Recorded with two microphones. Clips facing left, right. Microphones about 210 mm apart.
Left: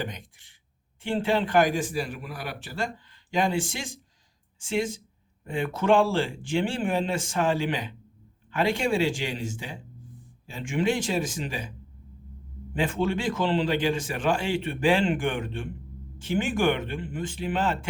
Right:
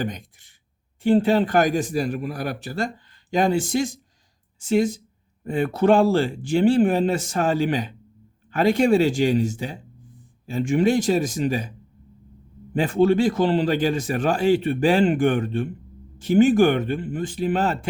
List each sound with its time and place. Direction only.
0.0 s a sound: 40° right (ahead or behind)
1.0 s speech: 40° right (ahead or behind)
12.7 s speech: 40° right (ahead or behind)